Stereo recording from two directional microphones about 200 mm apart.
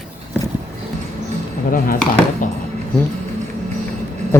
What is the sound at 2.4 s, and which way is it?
Speech, 40° left (ahead or behind).